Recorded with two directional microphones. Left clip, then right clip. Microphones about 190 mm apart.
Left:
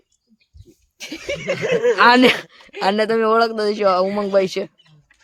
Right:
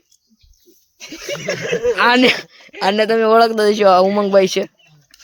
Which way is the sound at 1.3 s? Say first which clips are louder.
Even; 15° left (ahead or behind).